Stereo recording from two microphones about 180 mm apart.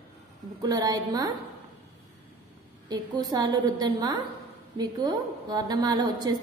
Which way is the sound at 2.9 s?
20° right (ahead or behind).